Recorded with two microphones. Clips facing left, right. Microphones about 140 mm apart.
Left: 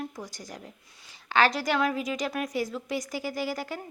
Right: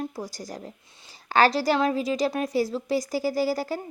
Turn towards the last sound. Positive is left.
turn(degrees=-35)  # may be behind; listen again after turning